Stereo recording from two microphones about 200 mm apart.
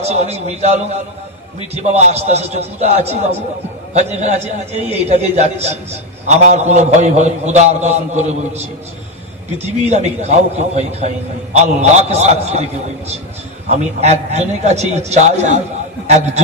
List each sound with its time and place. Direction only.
0.0 s a man's voice: 30° right (ahead or behind)
9.6 s a man's voice: 35° right (ahead or behind)
13.7 s a man's voice: 35° right (ahead or behind)